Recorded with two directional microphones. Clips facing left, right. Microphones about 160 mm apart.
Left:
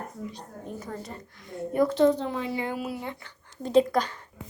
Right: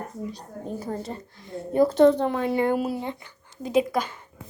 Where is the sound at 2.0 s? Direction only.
60° right (ahead or behind).